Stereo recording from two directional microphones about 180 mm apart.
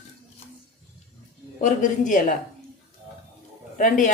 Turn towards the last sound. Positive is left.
turn(degrees=45)  # may be behind; listen again after turning